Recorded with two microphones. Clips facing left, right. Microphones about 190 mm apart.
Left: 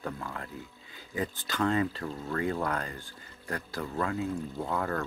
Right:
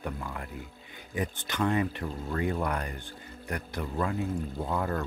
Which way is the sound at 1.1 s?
20° right (ahead or behind).